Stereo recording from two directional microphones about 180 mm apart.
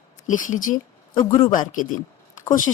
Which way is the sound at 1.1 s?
25° left (ahead or behind).